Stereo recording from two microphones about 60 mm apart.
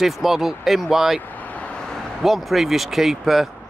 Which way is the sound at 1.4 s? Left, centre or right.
Left.